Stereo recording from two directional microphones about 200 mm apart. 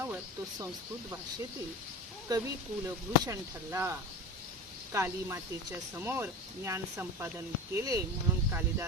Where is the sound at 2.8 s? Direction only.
15° right (ahead or behind).